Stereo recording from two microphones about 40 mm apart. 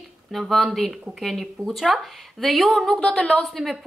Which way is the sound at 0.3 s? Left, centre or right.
Centre.